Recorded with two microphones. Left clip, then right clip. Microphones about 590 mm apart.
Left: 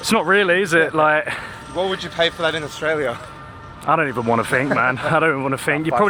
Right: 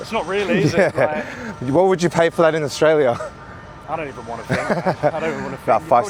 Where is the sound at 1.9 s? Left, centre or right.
Right.